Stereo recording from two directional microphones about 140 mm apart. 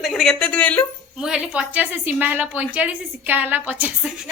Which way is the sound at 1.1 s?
5° right (ahead or behind).